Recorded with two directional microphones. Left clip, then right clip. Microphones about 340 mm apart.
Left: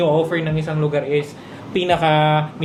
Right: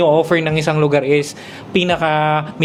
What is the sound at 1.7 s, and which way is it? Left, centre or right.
Speech, right.